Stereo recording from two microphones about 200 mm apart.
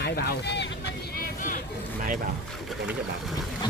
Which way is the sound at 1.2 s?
40° left (ahead or behind).